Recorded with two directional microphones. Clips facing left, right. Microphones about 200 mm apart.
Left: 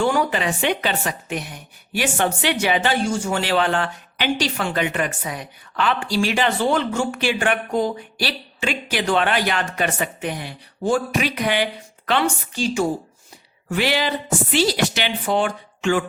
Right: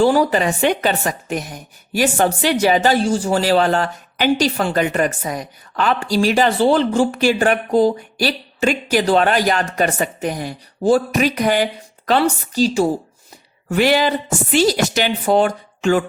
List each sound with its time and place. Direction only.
0.0 s a woman's voice: 35° right (ahead or behind)
13.7 s a woman's voice: 45° right (ahead or behind)